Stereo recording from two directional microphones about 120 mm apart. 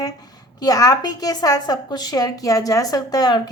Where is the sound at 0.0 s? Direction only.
30° left (ahead or behind).